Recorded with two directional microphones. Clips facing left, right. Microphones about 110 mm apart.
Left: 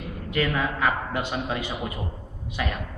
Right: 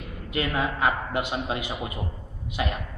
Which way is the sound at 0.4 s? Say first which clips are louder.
Left 1 dB; 15° right (ahead or behind).